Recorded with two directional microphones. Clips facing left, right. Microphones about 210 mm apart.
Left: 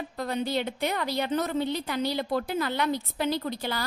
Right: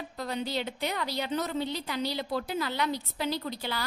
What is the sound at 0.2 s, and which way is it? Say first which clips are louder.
A woman's voice: left 4 dB; 50° left (ahead or behind).